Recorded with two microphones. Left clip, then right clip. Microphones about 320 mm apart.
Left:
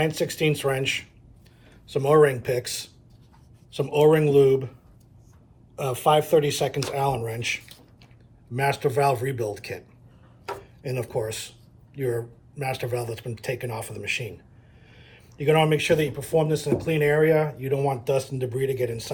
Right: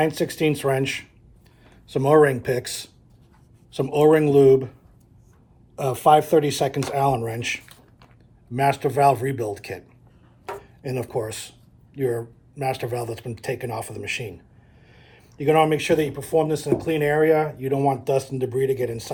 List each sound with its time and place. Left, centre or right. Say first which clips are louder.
0.0 s speech: right 2 dB; right
5.7 s speech: right 4 dB; right